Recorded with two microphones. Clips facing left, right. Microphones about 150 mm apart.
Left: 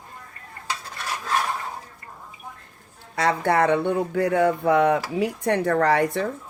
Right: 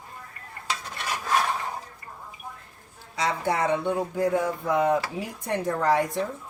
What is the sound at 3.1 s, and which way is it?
Speech, 60° left (ahead or behind).